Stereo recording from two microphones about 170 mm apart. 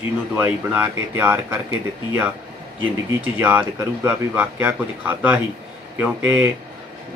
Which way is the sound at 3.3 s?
10° right (ahead or behind).